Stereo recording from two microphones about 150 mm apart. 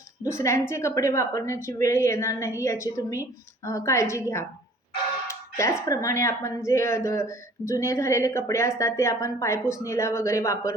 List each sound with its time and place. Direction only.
0.2 s a woman's voice: 20° left (ahead or behind)
5.5 s a woman's voice: 20° left (ahead or behind)